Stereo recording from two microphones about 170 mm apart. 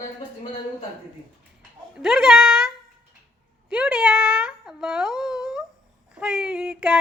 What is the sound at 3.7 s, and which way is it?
A woman's voice, 5° right (ahead or behind).